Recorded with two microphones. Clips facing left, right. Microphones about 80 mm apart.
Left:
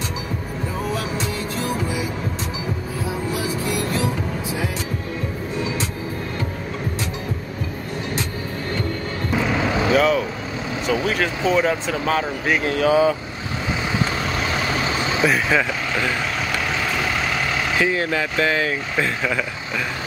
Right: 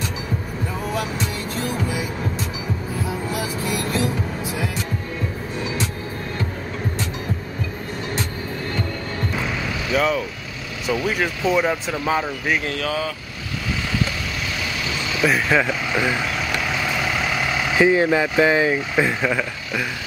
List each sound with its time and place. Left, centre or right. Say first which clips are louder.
9.9 s speech: even; centre
12.6 s speech: left 6 dB; centre
14.5 s vehicle: left 5 dB; left
15.2 s vehicle: right 2 dB; centre
17.7 s speech: right 6 dB; centre